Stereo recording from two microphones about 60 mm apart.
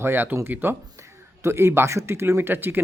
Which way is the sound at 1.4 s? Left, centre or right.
Right.